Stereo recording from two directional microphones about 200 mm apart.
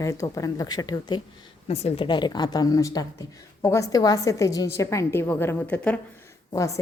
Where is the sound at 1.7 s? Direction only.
30° left (ahead or behind); by 6.8 s 15° left (ahead or behind).